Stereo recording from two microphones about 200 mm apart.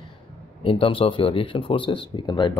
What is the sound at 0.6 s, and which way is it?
Speech, 25° left (ahead or behind).